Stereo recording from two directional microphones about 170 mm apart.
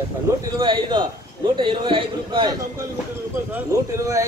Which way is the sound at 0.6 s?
25° right (ahead or behind).